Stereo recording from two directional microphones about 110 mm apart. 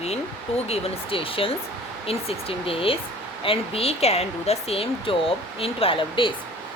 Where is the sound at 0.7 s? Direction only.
55° left (ahead or behind).